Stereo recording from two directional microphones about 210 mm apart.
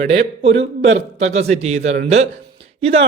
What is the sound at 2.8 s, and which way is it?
Speech, 30° right (ahead or behind).